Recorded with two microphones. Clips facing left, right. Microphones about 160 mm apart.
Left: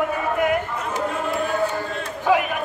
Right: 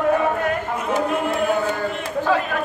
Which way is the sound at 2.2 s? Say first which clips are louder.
Left 2 dB; 15° left (ahead or behind).